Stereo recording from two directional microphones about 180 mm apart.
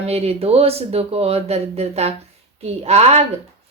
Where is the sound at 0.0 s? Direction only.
35° right (ahead or behind).